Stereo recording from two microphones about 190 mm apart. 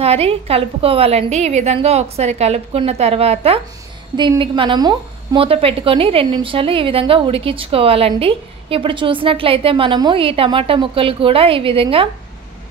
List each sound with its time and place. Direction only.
0.0 s a woman's voice: 30° right (ahead or behind)